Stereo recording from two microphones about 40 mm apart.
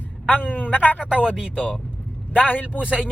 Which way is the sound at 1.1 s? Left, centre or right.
Right.